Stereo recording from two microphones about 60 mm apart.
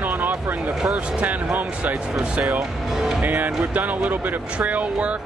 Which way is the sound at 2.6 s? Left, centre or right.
Centre.